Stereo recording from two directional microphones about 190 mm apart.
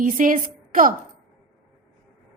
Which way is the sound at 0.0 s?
45° right (ahead or behind).